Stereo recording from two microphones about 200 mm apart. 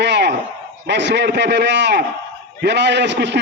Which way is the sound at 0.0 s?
60° right (ahead or behind).